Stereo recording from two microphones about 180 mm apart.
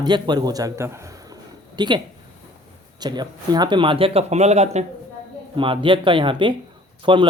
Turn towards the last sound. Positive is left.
turn(degrees=-30)  # may be behind; listen again after turning